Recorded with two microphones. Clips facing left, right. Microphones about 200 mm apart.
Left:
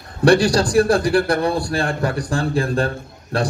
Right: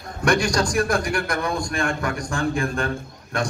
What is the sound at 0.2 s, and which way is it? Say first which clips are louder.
A man's voice: left 6 dB; 35° left (ahead or behind).